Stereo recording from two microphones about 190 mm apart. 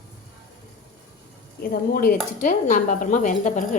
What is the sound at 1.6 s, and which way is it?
A woman's voice, 50° left (ahead or behind).